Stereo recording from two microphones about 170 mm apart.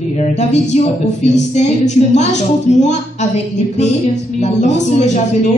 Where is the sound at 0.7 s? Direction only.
40° left (ahead or behind).